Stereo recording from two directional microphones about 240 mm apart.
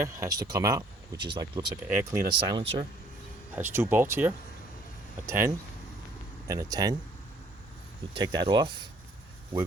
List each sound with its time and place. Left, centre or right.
0.0 s speech: centre
8.1 s speech: centre